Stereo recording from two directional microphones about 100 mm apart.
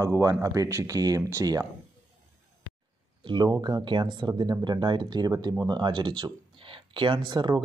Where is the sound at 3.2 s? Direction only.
45° right (ahead or behind).